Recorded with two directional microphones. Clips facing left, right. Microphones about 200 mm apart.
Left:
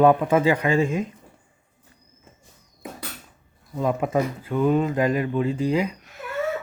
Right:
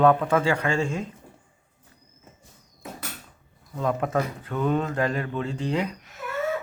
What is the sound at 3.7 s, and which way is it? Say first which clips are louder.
Speech: left 2 dB; 10° left (ahead or behind).